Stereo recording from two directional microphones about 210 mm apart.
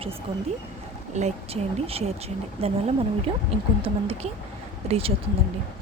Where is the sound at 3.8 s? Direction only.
25° right (ahead or behind).